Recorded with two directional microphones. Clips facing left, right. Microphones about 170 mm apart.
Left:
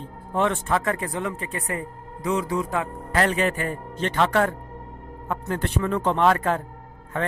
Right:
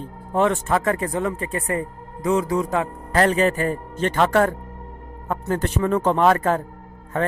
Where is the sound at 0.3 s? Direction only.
40° right (ahead or behind).